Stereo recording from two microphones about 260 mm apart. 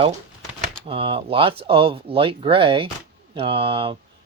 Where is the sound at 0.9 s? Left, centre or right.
Centre.